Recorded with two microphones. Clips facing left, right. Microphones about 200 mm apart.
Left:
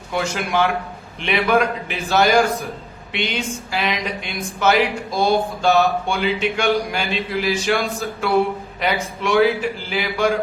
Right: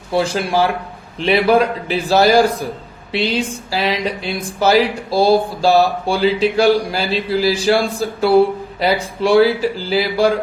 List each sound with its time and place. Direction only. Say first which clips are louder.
0.1 s speech: right 5 dB; 35° right (ahead or behind)